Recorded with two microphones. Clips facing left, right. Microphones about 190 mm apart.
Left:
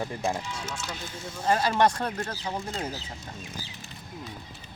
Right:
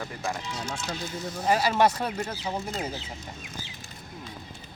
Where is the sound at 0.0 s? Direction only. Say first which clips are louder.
Left 3 dB; 25° left (ahead or behind).